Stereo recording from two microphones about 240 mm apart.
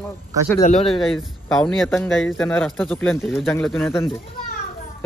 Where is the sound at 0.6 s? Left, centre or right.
Left.